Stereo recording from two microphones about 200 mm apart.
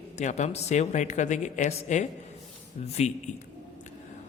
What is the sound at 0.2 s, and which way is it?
A man's voice, 35° left (ahead or behind).